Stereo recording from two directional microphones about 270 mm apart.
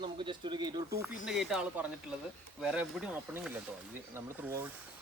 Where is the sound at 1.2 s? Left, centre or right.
Centre.